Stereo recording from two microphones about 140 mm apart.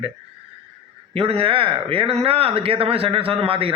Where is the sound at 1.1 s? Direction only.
45° right (ahead or behind).